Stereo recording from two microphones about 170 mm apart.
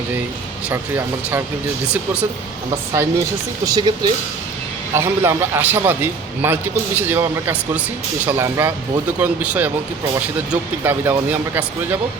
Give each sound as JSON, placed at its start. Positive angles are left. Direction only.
{"t": 0.7, "sound": "a man's voice", "side_deg": -15}
{"t": 2.9, "sound": "a man's voice", "side_deg": -15}
{"t": 4.9, "sound": "a man's voice", "side_deg": -15}